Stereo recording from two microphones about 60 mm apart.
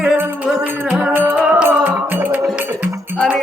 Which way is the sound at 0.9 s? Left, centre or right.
Right.